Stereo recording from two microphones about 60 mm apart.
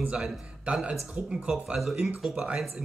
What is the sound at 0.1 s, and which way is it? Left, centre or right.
Speech, centre.